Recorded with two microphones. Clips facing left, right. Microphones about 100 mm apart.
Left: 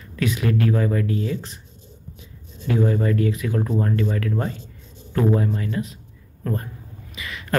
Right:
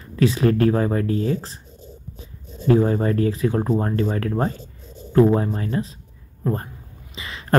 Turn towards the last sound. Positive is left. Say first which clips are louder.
# right 1 dB
turn(degrees=-30)  # may be behind; listen again after turning